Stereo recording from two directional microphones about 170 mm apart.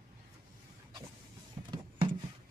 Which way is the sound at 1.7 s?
30° right (ahead or behind).